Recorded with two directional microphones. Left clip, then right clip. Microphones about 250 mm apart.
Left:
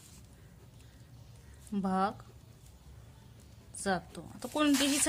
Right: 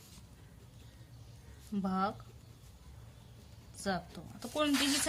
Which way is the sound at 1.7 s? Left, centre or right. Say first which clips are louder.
Left 3 dB; left.